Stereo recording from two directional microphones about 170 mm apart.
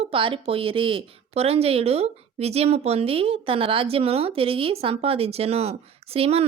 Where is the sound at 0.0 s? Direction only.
30° right (ahead or behind).